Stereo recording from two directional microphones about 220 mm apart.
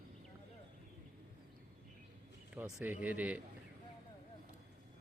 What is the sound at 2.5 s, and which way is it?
Speech, 10° right (ahead or behind).